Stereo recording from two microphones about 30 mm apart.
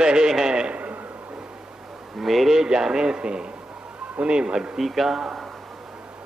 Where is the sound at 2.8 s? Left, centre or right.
Right.